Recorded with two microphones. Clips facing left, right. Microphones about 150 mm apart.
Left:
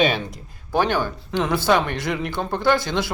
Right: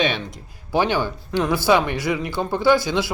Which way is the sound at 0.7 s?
10° right (ahead or behind).